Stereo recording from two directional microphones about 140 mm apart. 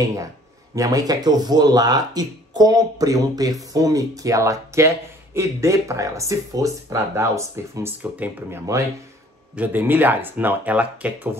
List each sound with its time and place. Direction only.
0.7 s speech: 25° right (ahead or behind); by 11.2 s 10° right (ahead or behind)